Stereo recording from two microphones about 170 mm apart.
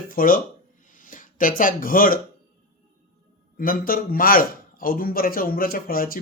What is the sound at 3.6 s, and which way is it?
Speech, 55° left (ahead or behind).